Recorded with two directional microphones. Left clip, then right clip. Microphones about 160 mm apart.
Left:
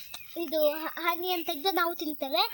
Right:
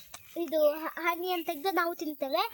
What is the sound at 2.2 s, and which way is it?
Speech, 5° right (ahead or behind).